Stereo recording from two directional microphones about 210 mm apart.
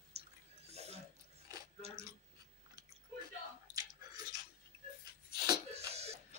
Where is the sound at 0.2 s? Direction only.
30° right (ahead or behind).